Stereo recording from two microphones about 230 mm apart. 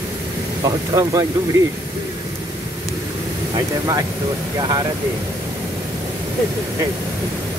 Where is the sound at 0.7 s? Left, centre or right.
Centre.